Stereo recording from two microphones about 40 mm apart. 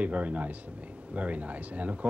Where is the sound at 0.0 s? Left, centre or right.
Right.